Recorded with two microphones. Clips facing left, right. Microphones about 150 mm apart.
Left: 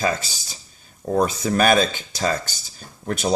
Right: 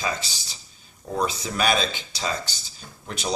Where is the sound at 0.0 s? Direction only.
50° left (ahead or behind).